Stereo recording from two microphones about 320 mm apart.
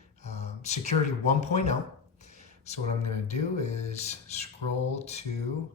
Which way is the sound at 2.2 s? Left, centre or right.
Left.